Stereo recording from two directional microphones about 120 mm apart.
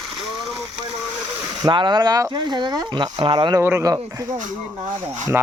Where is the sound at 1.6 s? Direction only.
40° right (ahead or behind).